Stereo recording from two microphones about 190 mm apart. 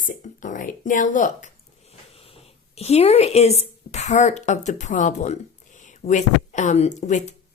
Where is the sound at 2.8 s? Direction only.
35° left (ahead or behind).